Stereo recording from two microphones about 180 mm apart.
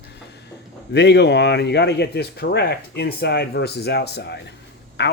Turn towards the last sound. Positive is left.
turn(degrees=70)  # may be behind; listen again after turning